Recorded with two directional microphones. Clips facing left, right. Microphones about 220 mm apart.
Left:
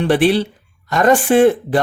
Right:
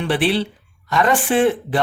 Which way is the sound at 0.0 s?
45° left (ahead or behind).